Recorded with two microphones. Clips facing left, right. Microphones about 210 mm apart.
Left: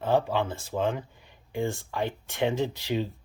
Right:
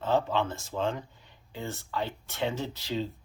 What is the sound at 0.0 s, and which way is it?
Speech, 10° left (ahead or behind).